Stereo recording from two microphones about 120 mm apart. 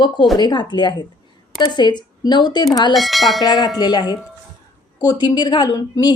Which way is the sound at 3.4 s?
35° left (ahead or behind).